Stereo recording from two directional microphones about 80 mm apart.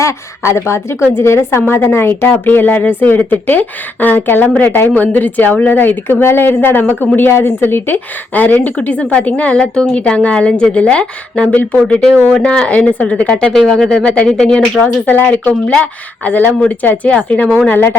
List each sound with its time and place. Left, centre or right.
0.0 s a woman's voice: left; by 14.8 s centre
15.0 s a woman's voice: left
17.7 s a woman's voice: left